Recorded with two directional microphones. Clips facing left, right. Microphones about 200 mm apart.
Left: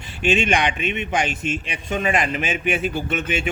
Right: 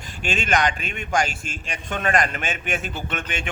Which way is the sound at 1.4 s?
40° right (ahead or behind).